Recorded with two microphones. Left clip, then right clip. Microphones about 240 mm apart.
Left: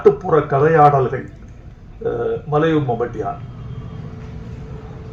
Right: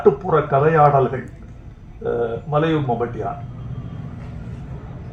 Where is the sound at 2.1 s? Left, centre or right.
Left.